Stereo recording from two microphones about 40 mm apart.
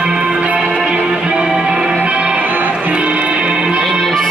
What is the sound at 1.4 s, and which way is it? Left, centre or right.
Music, right.